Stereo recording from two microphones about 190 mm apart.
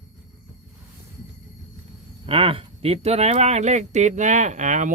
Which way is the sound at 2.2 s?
30° right (ahead or behind).